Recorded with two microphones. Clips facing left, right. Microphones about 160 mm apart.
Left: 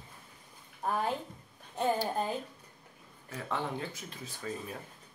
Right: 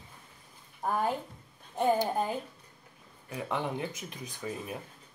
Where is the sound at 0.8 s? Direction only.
15° right (ahead or behind).